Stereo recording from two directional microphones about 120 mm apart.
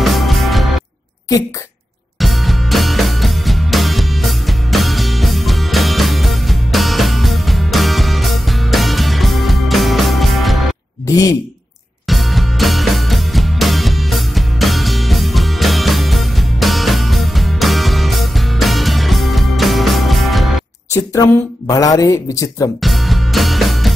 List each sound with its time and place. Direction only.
0.0 s music: centre (ahead or behind)
2.1 s music: centre (ahead or behind)
12.1 s music: centre (ahead or behind)
20.9 s speech: 30° left (ahead or behind)
22.8 s music: centre (ahead or behind)